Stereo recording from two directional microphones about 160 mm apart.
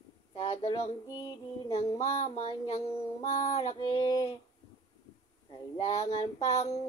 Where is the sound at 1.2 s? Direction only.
25° left (ahead or behind).